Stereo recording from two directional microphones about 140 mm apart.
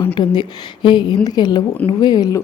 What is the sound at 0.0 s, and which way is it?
A woman's voice, 40° left (ahead or behind).